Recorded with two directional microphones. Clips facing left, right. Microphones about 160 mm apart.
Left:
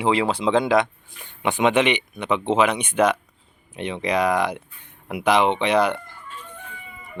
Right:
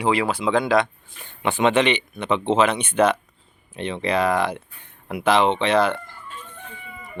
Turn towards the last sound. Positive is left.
turn(degrees=15)  # may be behind; listen again after turning